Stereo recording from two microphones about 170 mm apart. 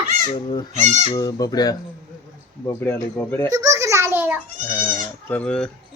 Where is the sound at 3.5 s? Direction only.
20° right (ahead or behind).